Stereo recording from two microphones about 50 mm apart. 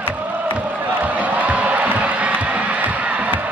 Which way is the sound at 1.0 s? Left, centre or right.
Right.